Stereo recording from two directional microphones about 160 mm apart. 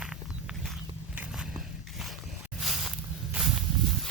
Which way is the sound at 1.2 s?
5° right (ahead or behind).